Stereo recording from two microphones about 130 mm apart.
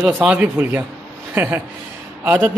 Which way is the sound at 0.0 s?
5° right (ahead or behind).